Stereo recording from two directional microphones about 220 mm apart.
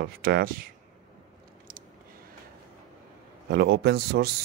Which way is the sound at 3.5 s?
50° right (ahead or behind).